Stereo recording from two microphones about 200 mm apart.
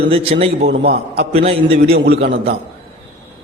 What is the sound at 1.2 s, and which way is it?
Speech, 30° right (ahead or behind).